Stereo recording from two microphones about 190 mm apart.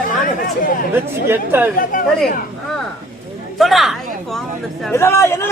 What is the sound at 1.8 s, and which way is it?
Speech, 45° left (ahead or behind).